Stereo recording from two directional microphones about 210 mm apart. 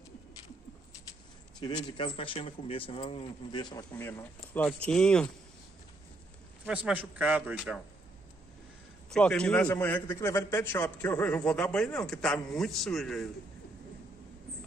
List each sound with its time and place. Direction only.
1.6 s speech: 20° left (ahead or behind); by 5.3 s 5° left (ahead or behind)
6.6 s a man's voice: 5° right (ahead or behind)
9.1 s a man's voice: 5° left (ahead or behind)